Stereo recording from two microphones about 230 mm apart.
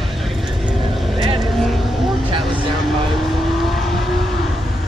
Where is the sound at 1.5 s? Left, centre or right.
Centre.